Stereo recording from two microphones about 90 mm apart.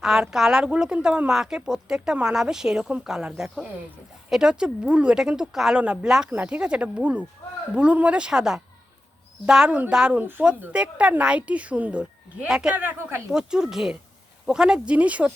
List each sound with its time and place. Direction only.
0.0 s speech: 5° right (ahead or behind)
12.8 s speech: 20° right (ahead or behind)
13.3 s speech: 5° right (ahead or behind)